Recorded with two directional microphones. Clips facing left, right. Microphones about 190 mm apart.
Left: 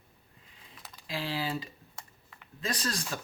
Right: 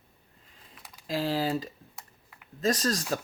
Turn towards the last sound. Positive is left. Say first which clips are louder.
# right 7 dB
turn(degrees=-40)  # may be behind; listen again after turning